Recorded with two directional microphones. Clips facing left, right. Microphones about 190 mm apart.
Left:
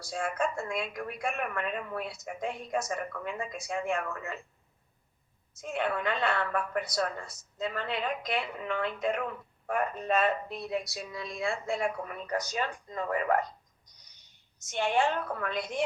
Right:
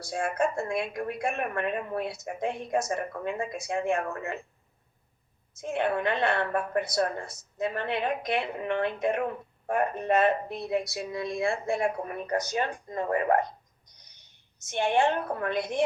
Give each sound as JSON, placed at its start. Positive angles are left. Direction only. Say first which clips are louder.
{"t": 0.0, "sound": "a woman's voice", "louder": "right 4 dB", "side_deg": -25}
{"t": 5.5, "sound": "a woman's voice", "louder": "right 4 dB", "side_deg": -25}
{"t": 14.7, "sound": "a woman's voice", "louder": "right 3 dB", "side_deg": -25}